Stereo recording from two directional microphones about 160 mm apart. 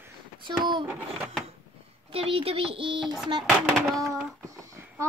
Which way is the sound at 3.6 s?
Centre (ahead or behind).